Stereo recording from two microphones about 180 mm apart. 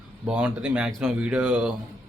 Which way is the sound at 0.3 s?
5° right (ahead or behind).